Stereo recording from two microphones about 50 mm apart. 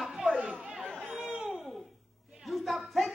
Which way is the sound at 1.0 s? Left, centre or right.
Centre.